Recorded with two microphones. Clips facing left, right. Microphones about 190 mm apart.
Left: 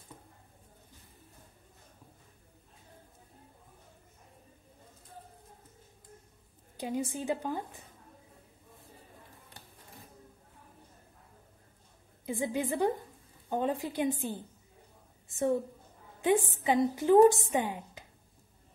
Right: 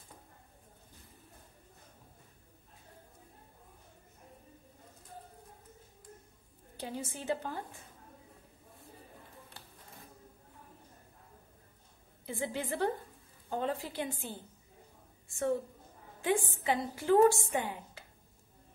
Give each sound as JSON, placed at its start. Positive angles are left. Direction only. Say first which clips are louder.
{"t": 6.8, "sound": "a woman's voice", "louder": "left 6 dB", "side_deg": 15}
{"t": 12.3, "sound": "a woman's voice", "louder": "left 4 dB", "side_deg": 15}
{"t": 16.6, "sound": "a woman's voice", "louder": "left 5 dB", "side_deg": 20}